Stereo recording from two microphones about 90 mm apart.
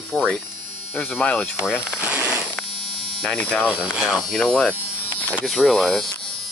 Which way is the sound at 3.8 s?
5° right (ahead or behind).